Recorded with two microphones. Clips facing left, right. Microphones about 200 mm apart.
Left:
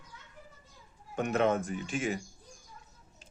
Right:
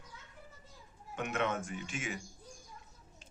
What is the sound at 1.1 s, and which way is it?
Speech, 35° left (ahead or behind).